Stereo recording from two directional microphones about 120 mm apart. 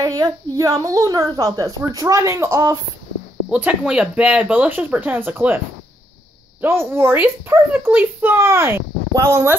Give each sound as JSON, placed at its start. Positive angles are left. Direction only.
{"t": 0.0, "sound": "speech", "side_deg": -30}
{"t": 3.4, "sound": "speech", "side_deg": -10}
{"t": 6.6, "sound": "speech", "side_deg": -20}